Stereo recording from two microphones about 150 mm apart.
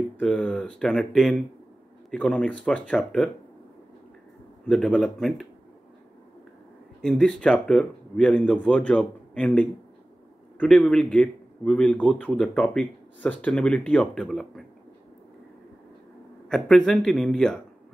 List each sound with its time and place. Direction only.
0.2 s a man's voice: 5° left (ahead or behind)
4.6 s speech: 5° left (ahead or behind)
7.0 s a man's voice: 5° left (ahead or behind)
16.4 s speech: 5° left (ahead or behind)